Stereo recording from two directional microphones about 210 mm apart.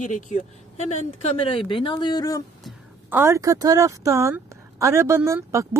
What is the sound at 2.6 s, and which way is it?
Speech, 10° right (ahead or behind).